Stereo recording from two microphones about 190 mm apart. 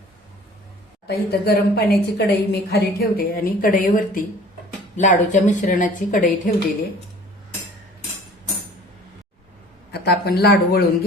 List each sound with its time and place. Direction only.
1.0 s a woman's voice: 55° left (ahead or behind)
9.9 s speech: 60° left (ahead or behind)